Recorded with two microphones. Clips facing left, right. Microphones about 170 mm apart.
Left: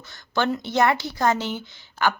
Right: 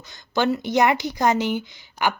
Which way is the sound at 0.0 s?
15° right (ahead or behind).